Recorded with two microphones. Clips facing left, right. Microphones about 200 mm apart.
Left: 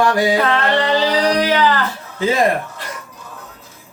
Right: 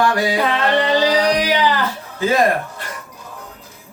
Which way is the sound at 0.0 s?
25° left (ahead or behind).